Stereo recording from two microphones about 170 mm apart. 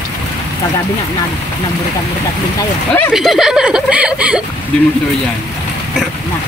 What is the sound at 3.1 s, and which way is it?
Speech, centre (ahead or behind).